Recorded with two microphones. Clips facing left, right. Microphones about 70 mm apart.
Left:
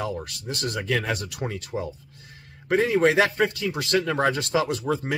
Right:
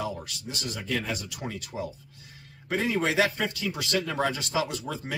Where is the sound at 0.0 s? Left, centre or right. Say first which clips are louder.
Left 3 dB; left.